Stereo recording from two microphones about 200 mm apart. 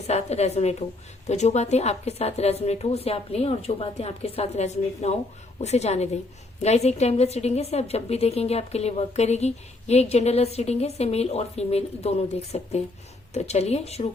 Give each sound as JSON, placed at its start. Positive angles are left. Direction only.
{"t": 0.1, "sound": "a woman's voice", "side_deg": 35}